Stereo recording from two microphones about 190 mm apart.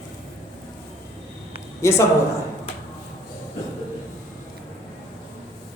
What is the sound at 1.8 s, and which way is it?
Speech, 15° left (ahead or behind).